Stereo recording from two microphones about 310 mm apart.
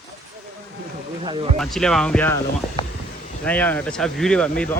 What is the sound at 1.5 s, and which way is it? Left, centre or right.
Speech, centre.